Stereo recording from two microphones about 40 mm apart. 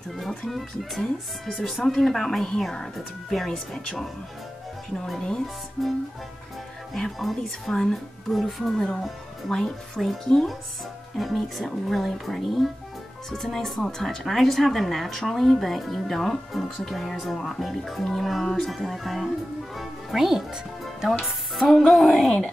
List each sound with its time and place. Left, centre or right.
0.5 s a woman's voice: centre
5.8 s speech: centre
8.7 s a woman's voice: centre
19.8 s music: centre
21.5 s speech: centre